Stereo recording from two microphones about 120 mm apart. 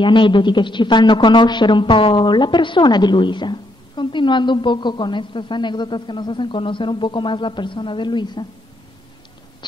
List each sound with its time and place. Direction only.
0.0 s speech: 40° left (ahead or behind)